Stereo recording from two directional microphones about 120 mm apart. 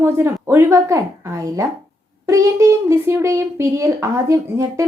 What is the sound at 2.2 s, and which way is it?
A woman's voice, 25° right (ahead or behind).